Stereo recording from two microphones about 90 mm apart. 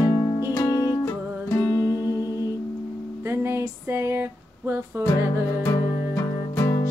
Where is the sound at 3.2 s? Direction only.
30° right (ahead or behind).